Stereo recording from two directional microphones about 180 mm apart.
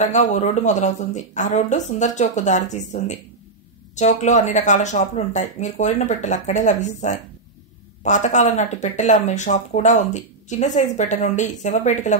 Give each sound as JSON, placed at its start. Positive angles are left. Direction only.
{"t": 0.0, "sound": "speech", "side_deg": 40}